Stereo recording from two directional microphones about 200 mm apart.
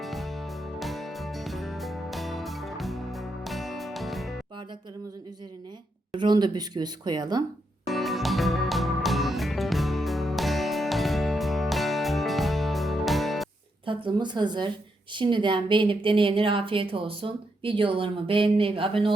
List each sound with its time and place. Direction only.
0.0 s music: centre (ahead or behind)
6.1 s speech: 20° right (ahead or behind)
7.9 s music: centre (ahead or behind)
13.8 s speech: 25° right (ahead or behind)